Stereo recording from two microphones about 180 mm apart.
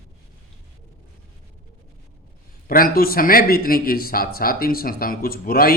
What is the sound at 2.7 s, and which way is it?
A man's voice, 50° left (ahead or behind).